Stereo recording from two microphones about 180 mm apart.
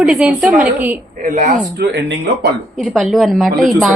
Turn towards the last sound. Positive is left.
turn(degrees=0)  # may be behind; listen again after turning